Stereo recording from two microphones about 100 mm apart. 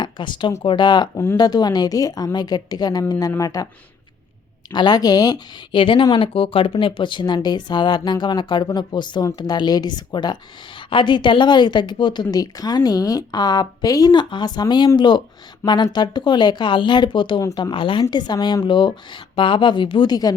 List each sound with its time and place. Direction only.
0.0 s speech: 50° left (ahead or behind)
1.1 s speech: 25° left (ahead or behind)
1.4 s a woman's voice: 45° left (ahead or behind)
4.7 s a woman's voice: 45° left (ahead or behind)
5.8 s speech: 60° left (ahead or behind)
18.1 s speech: 45° left (ahead or behind)